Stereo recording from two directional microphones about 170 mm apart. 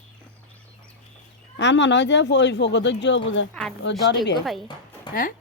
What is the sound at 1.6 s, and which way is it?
Speech, 90° left.